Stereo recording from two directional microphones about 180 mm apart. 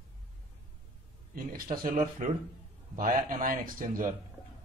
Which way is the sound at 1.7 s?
50° right (ahead or behind).